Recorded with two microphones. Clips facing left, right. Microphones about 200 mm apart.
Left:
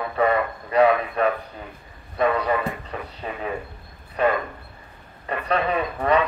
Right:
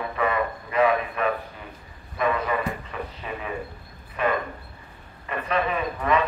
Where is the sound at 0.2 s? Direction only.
35° left (ahead or behind).